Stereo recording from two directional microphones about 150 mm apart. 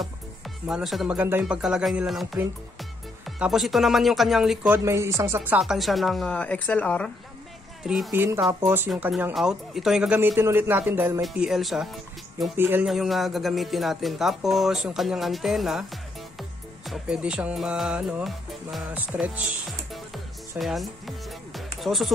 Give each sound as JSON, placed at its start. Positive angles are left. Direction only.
{"t": 0.7, "sound": "a man's voice", "side_deg": 0}
{"t": 4.7, "sound": "speech", "side_deg": -20}
{"t": 8.5, "sound": "a man's voice", "side_deg": -15}
{"t": 9.3, "sound": "a man's voice", "side_deg": 0}
{"t": 11.2, "sound": "speech", "side_deg": -5}
{"t": 12.5, "sound": "a man's voice", "side_deg": -15}
{"t": 12.8, "sound": "a man's voice", "side_deg": 0}
{"t": 20.5, "sound": "speech", "side_deg": 0}